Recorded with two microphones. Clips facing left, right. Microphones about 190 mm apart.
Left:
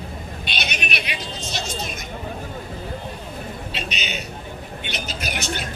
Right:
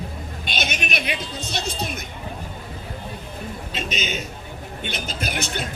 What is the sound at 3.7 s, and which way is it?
Speech, 45° right (ahead or behind).